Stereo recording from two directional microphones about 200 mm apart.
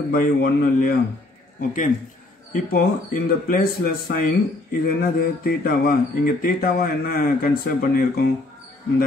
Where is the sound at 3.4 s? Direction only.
45° left (ahead or behind).